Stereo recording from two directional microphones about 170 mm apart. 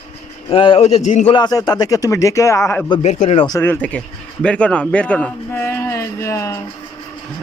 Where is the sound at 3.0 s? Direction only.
40° left (ahead or behind).